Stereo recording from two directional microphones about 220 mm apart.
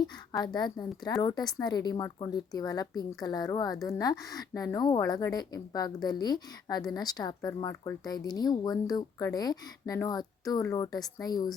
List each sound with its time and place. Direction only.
0.3 s a woman's voice: 20° left (ahead or behind)